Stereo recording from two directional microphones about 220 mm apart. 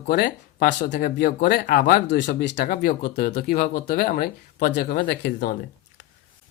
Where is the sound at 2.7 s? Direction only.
40° left (ahead or behind).